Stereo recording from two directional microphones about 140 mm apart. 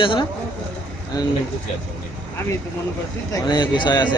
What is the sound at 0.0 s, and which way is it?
Speech, 35° left (ahead or behind).